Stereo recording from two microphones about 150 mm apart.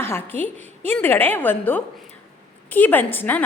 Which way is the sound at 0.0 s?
15° left (ahead or behind).